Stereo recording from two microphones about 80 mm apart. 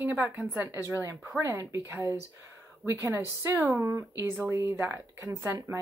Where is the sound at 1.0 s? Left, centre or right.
Right.